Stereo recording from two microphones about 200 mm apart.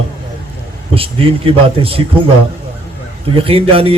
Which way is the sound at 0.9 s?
25° right (ahead or behind).